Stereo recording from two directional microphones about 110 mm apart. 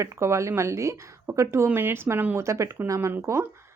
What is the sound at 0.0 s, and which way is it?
Speech, 25° right (ahead or behind).